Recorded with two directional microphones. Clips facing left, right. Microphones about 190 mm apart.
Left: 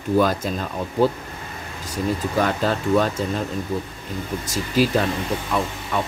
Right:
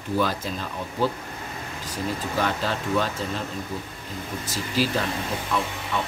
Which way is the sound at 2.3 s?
45° left (ahead or behind).